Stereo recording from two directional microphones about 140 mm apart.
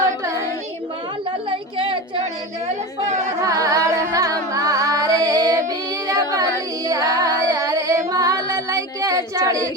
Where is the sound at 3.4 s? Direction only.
25° right (ahead or behind).